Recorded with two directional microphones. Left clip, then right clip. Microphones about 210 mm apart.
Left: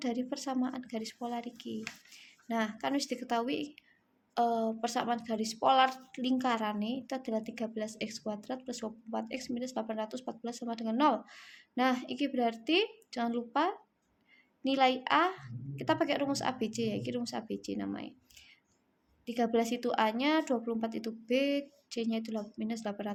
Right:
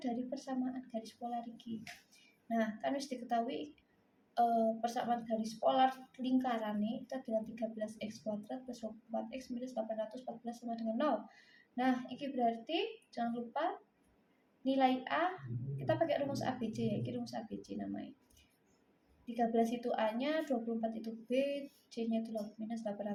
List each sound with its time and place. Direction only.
0.0 s speech: 45° left (ahead or behind)
19.2 s speech: 45° left (ahead or behind)